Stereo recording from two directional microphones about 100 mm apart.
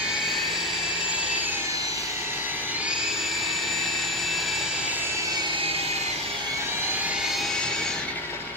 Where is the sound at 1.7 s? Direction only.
35° right (ahead or behind).